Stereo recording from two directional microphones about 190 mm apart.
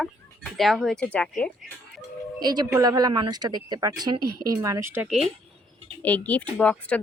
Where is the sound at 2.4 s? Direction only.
20° right (ahead or behind).